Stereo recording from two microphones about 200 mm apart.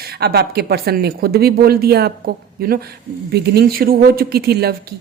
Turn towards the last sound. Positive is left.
turn(degrees=-50)  # may be behind; listen again after turning